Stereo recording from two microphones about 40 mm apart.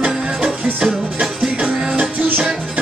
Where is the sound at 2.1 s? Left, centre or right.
Right.